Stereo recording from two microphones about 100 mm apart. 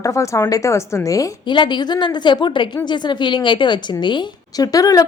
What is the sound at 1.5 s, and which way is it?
A woman's voice, 50° left (ahead or behind).